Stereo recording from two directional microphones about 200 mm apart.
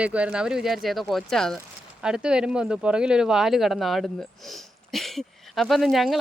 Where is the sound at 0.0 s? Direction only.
5° right (ahead or behind).